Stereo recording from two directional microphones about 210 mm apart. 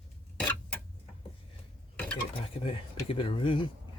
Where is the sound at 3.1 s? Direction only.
25° left (ahead or behind).